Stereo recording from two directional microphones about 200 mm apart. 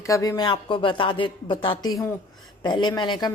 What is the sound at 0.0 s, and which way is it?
A woman's voice, 15° left (ahead or behind).